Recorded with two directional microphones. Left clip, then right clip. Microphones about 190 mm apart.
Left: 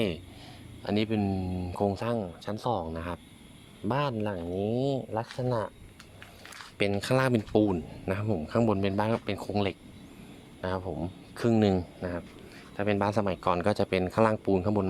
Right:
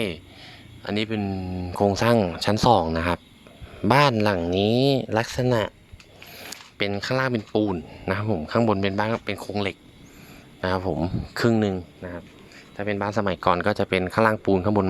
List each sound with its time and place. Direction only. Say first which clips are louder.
0.8 s speech: right 2 dB; centre (ahead or behind); by 4.4 s 20° right (ahead or behind)
4.4 s speech: right 6 dB; 35° right (ahead or behind)
6.7 s speech: right 2 dB; 10° right (ahead or behind)
7.0 s speech: right 2 dB; 5° left (ahead or behind)
10.6 s speech: right 8 dB; 25° right (ahead or behind)
11.5 s speech: right 1 dB; centre (ahead or behind)